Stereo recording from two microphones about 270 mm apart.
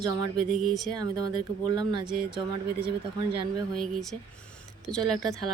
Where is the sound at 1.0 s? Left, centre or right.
Centre.